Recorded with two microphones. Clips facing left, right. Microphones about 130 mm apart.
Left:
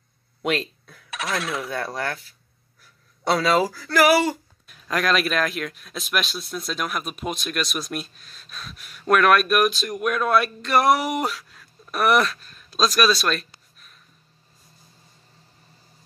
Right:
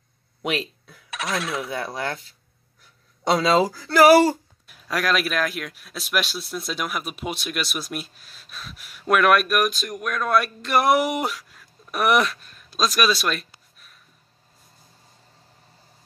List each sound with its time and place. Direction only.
0.4 s speech: 10° right (ahead or behind)
1.1 s coin: centre (ahead or behind)
1.7 s speech: 15° right (ahead or behind)
4.6 s speech: 5° right (ahead or behind)
10.6 s speech: 10° right (ahead or behind)